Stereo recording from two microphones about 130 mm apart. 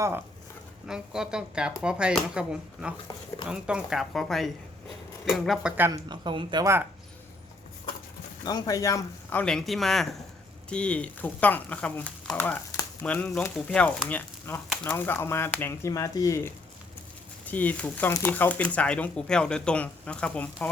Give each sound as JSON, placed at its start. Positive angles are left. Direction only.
{"t": 0.9, "sound": "speech", "side_deg": -5}
{"t": 5.9, "sound": "speech", "side_deg": -35}
{"t": 8.4, "sound": "speech", "side_deg": 30}
{"t": 9.4, "sound": "speech", "side_deg": 5}
{"t": 14.1, "sound": "chopping", "side_deg": 15}
{"t": 14.8, "sound": "speech", "side_deg": 15}
{"t": 17.4, "sound": "speech", "side_deg": 10}